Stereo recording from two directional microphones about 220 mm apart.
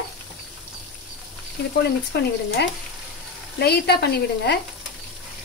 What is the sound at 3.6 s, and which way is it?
Speech, 45° left (ahead or behind).